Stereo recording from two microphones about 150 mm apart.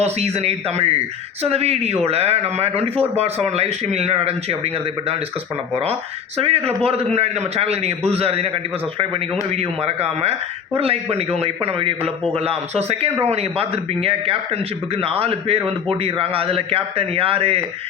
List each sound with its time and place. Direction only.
0.0 s speech: 45° right (ahead or behind)
9.6 s a man's voice: 45° right (ahead or behind)